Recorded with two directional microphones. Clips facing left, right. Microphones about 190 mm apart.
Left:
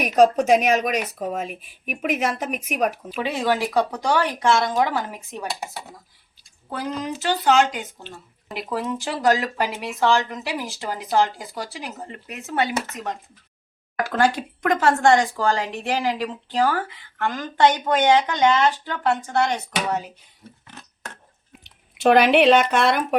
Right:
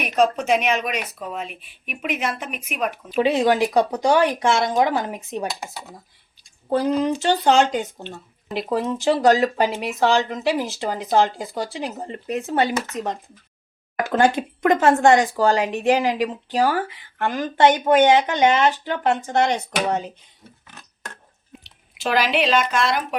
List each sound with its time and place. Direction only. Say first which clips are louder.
0.0 s speech: left 3 dB; 40° left (ahead or behind)
3.2 s speech: right 6 dB; 20° right (ahead or behind)
7.2 s speech: left 2 dB; 30° right (ahead or behind)
14.0 s speech: right 2 dB; 20° right (ahead or behind)
22.0 s speech: left 6 dB; 60° left (ahead or behind)